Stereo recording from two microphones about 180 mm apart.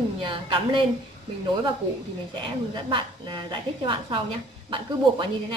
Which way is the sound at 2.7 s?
25° right (ahead or behind).